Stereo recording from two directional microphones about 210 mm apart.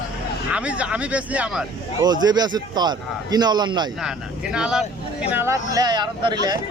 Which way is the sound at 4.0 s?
5° right (ahead or behind).